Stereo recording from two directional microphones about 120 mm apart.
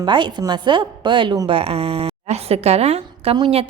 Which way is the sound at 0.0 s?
40° right (ahead or behind).